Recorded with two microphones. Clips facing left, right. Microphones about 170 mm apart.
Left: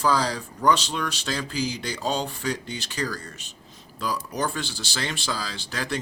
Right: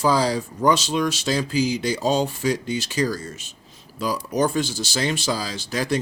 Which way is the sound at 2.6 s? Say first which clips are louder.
Right 7 dB; 15° right (ahead or behind).